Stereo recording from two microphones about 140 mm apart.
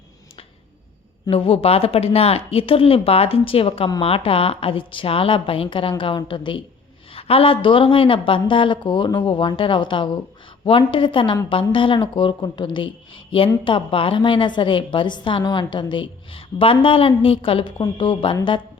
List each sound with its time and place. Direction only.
1.3 s a woman's voice: 45° left (ahead or behind)